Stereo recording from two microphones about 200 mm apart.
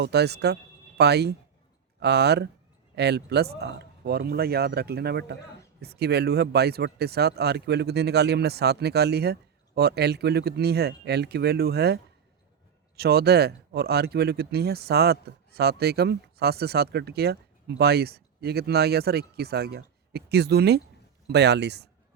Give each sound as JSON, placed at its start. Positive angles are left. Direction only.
{"t": 0.0, "sound": "speech", "side_deg": -55}
{"t": 13.0, "sound": "speech", "side_deg": -50}